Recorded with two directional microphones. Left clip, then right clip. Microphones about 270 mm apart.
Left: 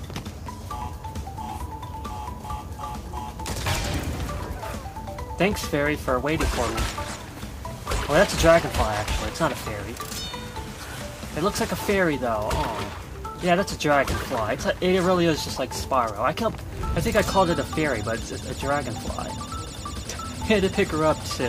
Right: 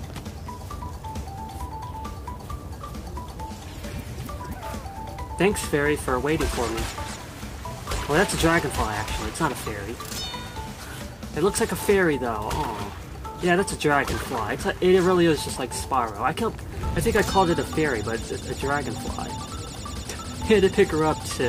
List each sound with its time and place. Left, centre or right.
5.4 s speech: centre
7.9 s speech: centre
11.3 s speech: centre
20.4 s speech: centre